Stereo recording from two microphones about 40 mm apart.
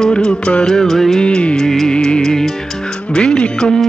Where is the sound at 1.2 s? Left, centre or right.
Left.